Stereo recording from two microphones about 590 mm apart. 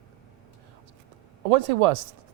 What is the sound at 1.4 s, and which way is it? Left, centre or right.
Speech, right.